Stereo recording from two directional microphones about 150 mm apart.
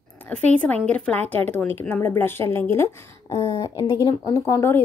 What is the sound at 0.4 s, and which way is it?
A woman's voice, 10° left (ahead or behind).